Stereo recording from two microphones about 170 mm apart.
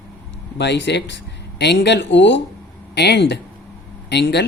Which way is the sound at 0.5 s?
90° left.